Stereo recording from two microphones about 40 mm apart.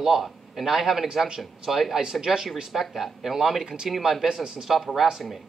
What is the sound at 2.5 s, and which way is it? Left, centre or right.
A man's voice, centre.